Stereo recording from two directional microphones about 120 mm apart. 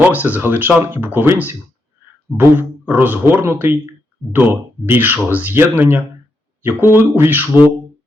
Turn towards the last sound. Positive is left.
turn(degrees=-15)  # may be behind; listen again after turning